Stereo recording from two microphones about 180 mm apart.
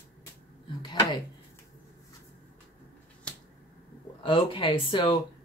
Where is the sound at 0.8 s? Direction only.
25° left (ahead or behind).